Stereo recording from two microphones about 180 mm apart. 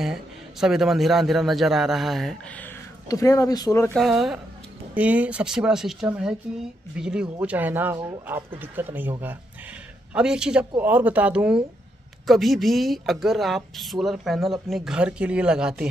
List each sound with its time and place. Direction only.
0.0 s a man's voice: 5° right (ahead or behind)
3.1 s speech: 20° left (ahead or behind)
3.9 s a man's voice: centre (ahead or behind)
10.1 s a man's voice: 5° right (ahead or behind)